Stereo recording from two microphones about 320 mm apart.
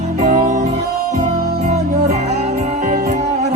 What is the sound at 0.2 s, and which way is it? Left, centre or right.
Music, right.